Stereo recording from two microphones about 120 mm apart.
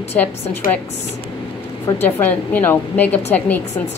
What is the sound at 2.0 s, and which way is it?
A woman's voice, 15° left (ahead or behind).